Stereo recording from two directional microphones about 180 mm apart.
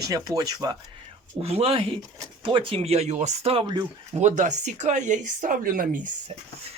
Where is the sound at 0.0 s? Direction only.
20° right (ahead or behind).